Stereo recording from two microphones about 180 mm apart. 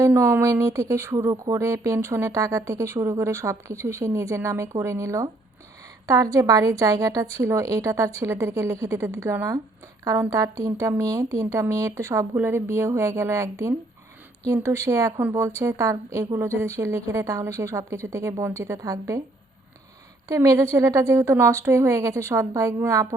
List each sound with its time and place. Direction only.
0.0 s a woman's voice: 15° right (ahead or behind)
20.2 s speech: 20° right (ahead or behind)